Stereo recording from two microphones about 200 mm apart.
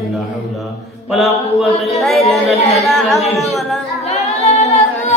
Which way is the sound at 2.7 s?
Centre (ahead or behind).